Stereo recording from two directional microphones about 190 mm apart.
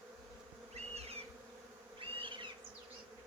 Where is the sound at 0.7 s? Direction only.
35° right (ahead or behind).